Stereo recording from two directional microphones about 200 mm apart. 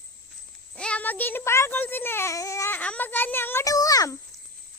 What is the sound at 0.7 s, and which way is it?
A child's voice, 5° left (ahead or behind).